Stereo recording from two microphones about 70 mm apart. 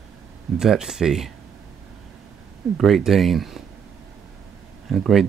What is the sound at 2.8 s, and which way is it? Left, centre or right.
Speech, centre.